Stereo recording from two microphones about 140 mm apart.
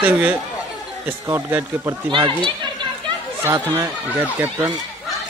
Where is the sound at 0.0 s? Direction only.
15° right (ahead or behind).